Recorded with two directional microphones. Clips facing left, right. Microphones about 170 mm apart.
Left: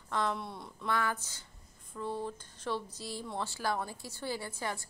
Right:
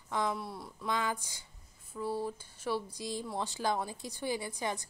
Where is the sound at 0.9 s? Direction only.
15° right (ahead or behind).